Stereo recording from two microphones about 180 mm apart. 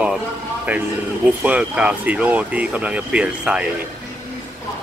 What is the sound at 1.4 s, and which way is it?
Speech, 5° right (ahead or behind).